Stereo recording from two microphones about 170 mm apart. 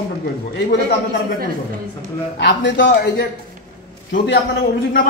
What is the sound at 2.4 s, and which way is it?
A man's voice, 90° left.